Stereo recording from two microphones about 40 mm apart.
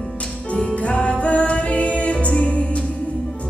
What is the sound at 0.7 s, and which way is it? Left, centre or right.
Music, left.